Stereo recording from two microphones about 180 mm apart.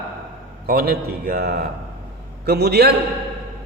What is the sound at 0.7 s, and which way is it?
A man's voice, 60° right (ahead or behind).